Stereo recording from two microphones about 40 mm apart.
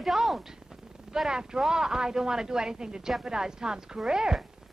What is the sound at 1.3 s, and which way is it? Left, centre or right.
Speech, centre.